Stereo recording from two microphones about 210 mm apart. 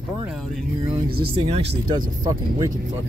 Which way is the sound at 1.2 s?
30° right (ahead or behind).